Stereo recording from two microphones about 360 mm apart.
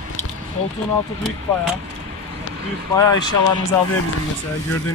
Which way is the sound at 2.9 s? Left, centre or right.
Centre.